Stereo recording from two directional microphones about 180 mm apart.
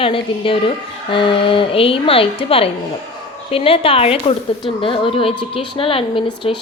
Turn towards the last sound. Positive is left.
turn(degrees=30)  # may be behind; listen again after turning